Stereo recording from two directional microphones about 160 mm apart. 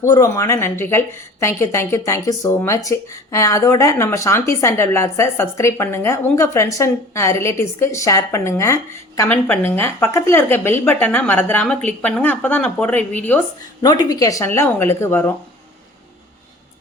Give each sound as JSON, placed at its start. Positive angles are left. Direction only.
{"t": 0.0, "sound": "a woman's voice", "side_deg": 20}
{"t": 13.8, "sound": "a woman's voice", "side_deg": 25}